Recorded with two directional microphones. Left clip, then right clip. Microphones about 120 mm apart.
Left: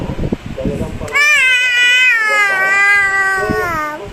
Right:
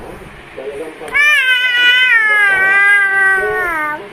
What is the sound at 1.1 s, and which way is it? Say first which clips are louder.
Cat: even; 30° left (ahead or behind).